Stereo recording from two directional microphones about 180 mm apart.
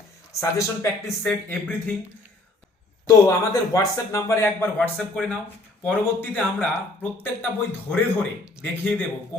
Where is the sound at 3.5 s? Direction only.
20° left (ahead or behind).